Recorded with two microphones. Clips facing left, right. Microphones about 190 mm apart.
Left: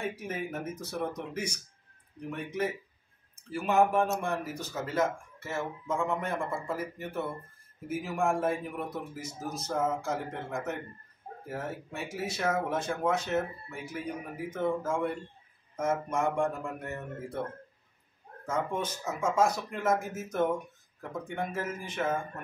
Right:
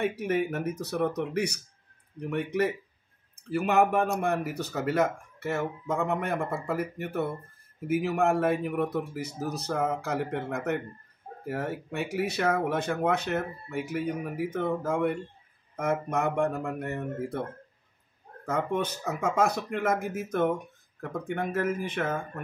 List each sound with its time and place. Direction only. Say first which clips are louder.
0.0 s speech: right 8 dB; 65° right (ahead or behind)
18.4 s speech: right 3 dB; 65° right (ahead or behind)